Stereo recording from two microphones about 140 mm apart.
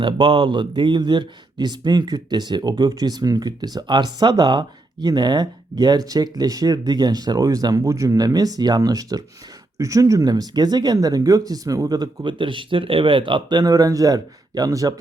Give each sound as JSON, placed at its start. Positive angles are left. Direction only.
{"t": 0.0, "sound": "speech", "side_deg": -40}